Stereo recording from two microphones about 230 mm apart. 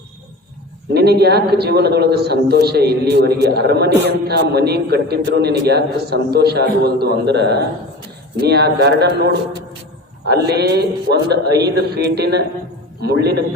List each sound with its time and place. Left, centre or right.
0.9 s a man's voice: right